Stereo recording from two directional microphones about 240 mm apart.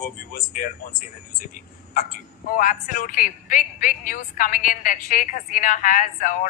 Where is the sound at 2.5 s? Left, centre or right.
Left.